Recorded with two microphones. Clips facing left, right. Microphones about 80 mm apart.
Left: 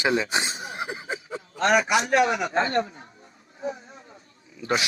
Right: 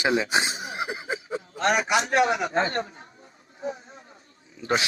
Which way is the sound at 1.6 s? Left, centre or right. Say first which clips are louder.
Left 2 dB; right.